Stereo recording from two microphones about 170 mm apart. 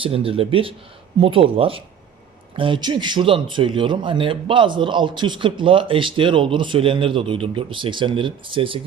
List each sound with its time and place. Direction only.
0.0 s a man's voice: 35° right (ahead or behind)